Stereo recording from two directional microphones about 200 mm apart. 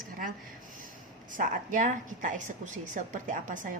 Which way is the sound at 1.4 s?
40° right (ahead or behind).